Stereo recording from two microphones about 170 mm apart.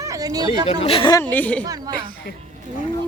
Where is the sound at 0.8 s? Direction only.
35° left (ahead or behind).